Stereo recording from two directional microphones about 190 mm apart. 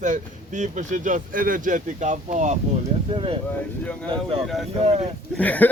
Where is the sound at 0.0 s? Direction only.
40° right (ahead or behind).